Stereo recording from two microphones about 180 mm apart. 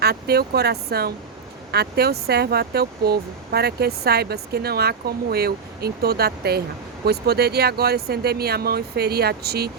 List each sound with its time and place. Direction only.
0.0 s speech: 60° right (ahead or behind)